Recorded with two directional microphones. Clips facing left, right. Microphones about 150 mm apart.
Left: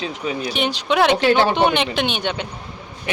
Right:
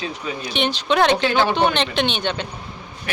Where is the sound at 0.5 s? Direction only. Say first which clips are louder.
Right 1 dB; 5° left (ahead or behind).